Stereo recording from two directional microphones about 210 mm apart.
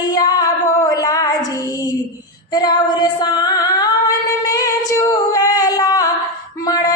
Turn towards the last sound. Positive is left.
turn(degrees=20)  # may be behind; listen again after turning